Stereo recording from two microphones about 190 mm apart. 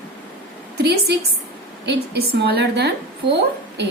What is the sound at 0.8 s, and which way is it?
A woman's voice, 60° right (ahead or behind).